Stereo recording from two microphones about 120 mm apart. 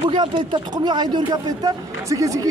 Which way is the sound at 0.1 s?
40° right (ahead or behind).